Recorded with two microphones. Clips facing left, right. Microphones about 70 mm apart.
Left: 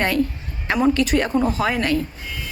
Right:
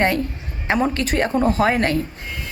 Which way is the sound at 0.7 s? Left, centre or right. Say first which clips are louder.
Left 2 dB; right.